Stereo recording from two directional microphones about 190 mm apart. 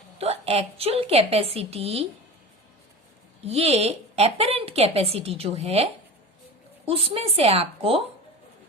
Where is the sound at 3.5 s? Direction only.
35° right (ahead or behind).